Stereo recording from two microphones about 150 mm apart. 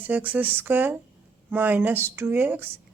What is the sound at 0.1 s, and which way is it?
A woman's voice, 10° right (ahead or behind).